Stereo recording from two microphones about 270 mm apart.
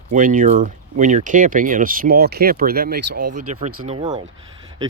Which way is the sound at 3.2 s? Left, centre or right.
Right.